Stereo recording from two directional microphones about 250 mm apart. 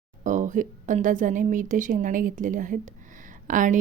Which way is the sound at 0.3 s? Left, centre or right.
Right.